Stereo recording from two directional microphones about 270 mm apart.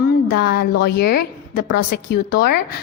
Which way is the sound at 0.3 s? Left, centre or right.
Left.